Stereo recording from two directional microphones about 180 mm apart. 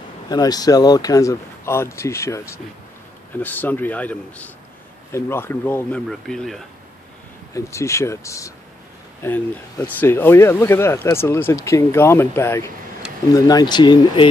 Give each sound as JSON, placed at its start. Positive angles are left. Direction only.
{"t": 0.3, "sound": "speech", "side_deg": 20}
{"t": 7.5, "sound": "speech", "side_deg": 15}